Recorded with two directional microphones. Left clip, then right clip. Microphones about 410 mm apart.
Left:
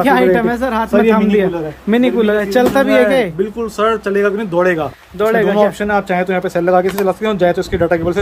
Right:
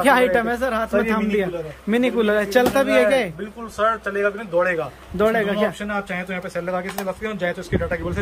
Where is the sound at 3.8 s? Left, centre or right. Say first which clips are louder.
Left 6 dB; left.